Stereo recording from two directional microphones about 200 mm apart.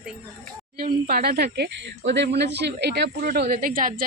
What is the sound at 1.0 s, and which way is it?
Speech, 50° right (ahead or behind).